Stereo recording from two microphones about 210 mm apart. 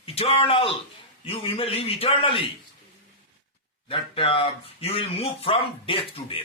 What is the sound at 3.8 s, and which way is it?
Speech, 25° left (ahead or behind).